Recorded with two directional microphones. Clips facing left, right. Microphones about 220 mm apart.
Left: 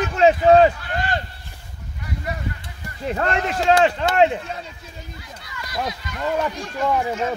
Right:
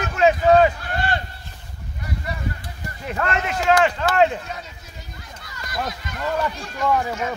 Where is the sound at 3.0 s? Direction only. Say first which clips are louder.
Left 2 dB; 30° left (ahead or behind).